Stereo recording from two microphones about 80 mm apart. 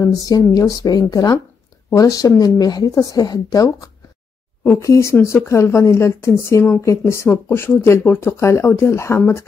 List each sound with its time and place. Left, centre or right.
0.0 s speech: left